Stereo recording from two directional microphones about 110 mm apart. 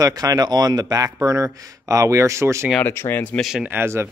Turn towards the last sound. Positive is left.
turn(degrees=-20)  # may be behind; listen again after turning